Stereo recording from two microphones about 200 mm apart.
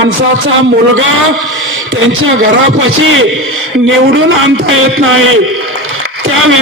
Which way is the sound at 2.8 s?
80° right.